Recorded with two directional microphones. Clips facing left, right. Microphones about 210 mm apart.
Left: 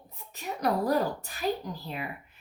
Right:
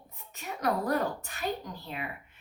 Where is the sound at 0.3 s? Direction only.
35° left (ahead or behind).